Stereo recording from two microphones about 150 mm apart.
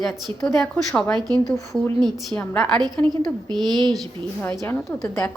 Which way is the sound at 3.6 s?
30° right (ahead or behind).